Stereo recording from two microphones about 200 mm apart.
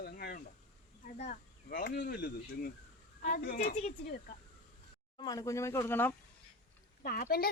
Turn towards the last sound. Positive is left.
turn(degrees=50)  # may be behind; listen again after turning